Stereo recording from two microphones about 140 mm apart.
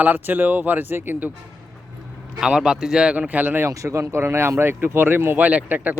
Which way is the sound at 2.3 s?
5° right (ahead or behind).